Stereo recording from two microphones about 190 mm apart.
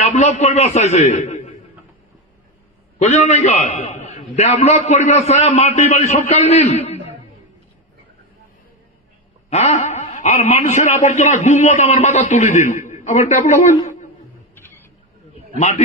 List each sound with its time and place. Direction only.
0.0 s speech: 35° left (ahead or behind)
3.0 s speech: 35° left (ahead or behind)
9.5 s speech: 35° left (ahead or behind)
14.5 s a sound: 10° left (ahead or behind)